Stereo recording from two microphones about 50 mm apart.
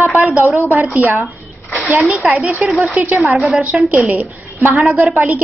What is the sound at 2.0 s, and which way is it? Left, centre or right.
A woman's voice, right.